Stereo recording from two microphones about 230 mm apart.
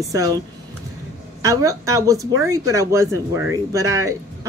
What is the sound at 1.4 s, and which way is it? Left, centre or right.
Speech, centre.